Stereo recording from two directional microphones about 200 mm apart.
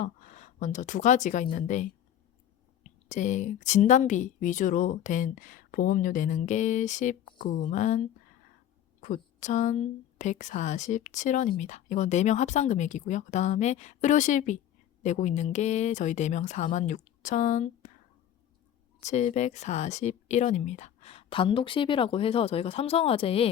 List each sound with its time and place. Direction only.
0.0 s speech: 40° left (ahead or behind)
3.1 s speech: 40° left (ahead or behind)
18.9 s speech: 35° left (ahead or behind)